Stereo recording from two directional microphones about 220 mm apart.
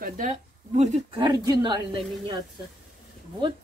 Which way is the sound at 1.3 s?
20° right (ahead or behind).